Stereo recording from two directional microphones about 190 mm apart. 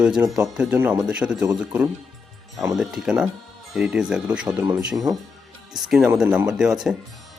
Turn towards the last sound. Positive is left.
turn(degrees=-5)  # may be behind; listen again after turning